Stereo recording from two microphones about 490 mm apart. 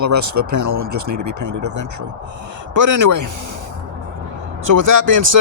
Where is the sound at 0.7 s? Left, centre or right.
Right.